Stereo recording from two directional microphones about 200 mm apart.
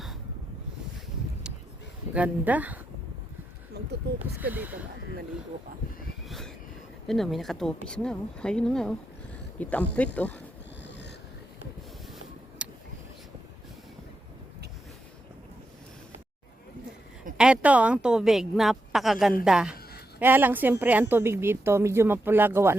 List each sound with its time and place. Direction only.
2.1 s a woman's voice: 5° right (ahead or behind)
3.8 s speech: 55° right (ahead or behind)
4.4 s a woman's voice: 10° right (ahead or behind)
6.2 s vehicle: centre (ahead or behind)
7.1 s a woman's voice: centre (ahead or behind)
10.8 s a sound: 60° left (ahead or behind)
12.6 s a sound: 5° right (ahead or behind)
17.3 s a woman's voice: 5° right (ahead or behind)